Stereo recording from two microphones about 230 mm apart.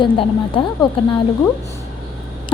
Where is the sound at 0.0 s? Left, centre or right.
Left.